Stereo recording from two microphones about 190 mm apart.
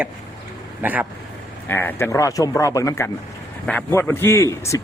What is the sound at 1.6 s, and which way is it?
A man's voice, 10° left (ahead or behind).